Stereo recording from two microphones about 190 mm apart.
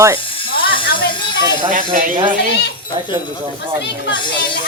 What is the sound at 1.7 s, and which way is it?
Speech, 45° right (ahead or behind).